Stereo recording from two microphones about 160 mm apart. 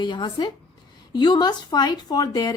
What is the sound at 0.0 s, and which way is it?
Speech, 30° left (ahead or behind).